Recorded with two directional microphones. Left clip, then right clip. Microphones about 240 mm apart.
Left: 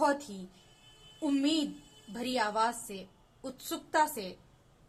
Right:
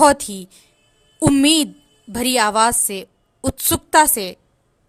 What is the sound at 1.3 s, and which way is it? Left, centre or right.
A woman's voice, right.